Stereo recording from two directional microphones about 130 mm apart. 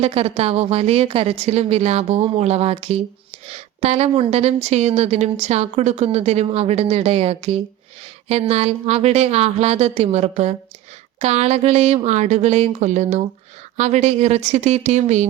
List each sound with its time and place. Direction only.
0.0 s a woman's voice: 50° right (ahead or behind)